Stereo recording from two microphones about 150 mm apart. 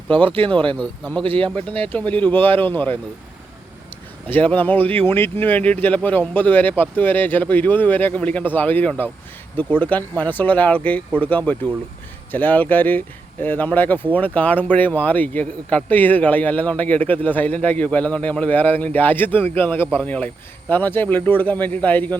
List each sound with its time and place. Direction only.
0.1 s speech: 35° right (ahead or behind)
1.7 s speech: 10° left (ahead or behind)
4.3 s speech: 10° left (ahead or behind)